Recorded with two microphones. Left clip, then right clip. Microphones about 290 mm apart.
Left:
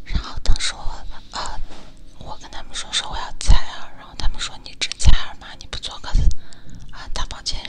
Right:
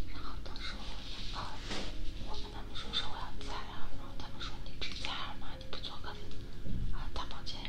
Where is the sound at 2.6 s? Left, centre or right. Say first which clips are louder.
Left 14 dB; left.